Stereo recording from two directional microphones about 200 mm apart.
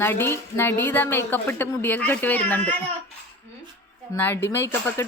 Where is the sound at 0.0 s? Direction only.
10° left (ahead or behind).